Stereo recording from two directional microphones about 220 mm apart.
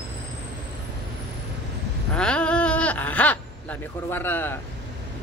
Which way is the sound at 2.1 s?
5° left (ahead or behind).